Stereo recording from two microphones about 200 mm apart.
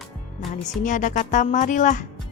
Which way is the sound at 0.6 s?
40° left (ahead or behind).